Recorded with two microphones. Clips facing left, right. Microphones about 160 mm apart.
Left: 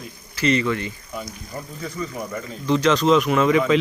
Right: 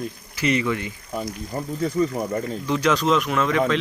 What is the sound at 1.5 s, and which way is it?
Speech, 30° right (ahead or behind).